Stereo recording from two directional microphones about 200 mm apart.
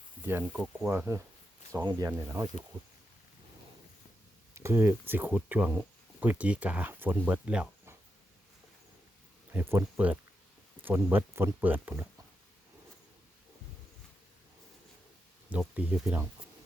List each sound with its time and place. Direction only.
0.3 s speech: 10° right (ahead or behind)
4.5 s speech: 10° right (ahead or behind)
9.5 s speech: 10° right (ahead or behind)
15.4 s speech: 5° right (ahead or behind)